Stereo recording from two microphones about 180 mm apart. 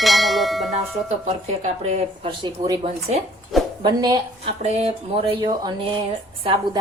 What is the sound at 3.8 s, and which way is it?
Speech, 20° right (ahead or behind).